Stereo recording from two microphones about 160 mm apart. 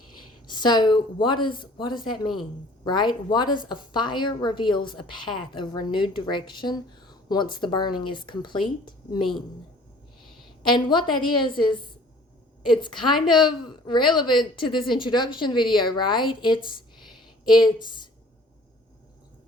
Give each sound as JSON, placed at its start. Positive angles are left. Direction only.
{"t": 0.5, "sound": "a woman's voice", "side_deg": 25}
{"t": 10.7, "sound": "a woman's voice", "side_deg": 30}